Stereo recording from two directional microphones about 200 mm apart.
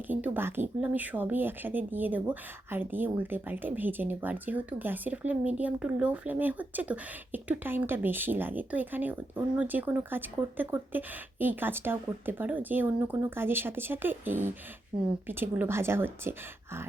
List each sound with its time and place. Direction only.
0.1 s speech: 10° right (ahead or behind)